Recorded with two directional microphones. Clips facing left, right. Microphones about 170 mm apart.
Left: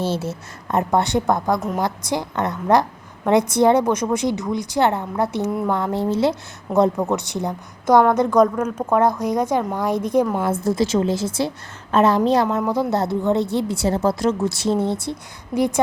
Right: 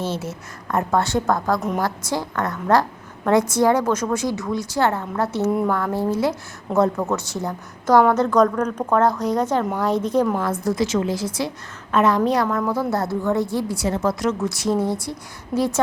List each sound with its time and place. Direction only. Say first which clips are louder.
0.0 s a woman's voice: left 3 dB; 30° left (ahead or behind)
0.7 s a woman's voice: left 2 dB; 20° left (ahead or behind)
1.5 s a woman's voice: even; centre (ahead or behind)
1.8 s a woman's voice: left 1 dB; 20° left (ahead or behind)
10.4 s a woman's voice: left 2 dB; 25° left (ahead or behind)